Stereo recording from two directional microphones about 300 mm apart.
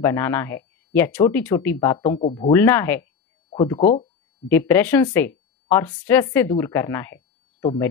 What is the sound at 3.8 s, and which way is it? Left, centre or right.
Speech, left.